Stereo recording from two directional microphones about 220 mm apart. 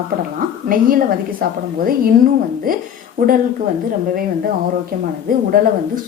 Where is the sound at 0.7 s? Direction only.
40° right (ahead or behind).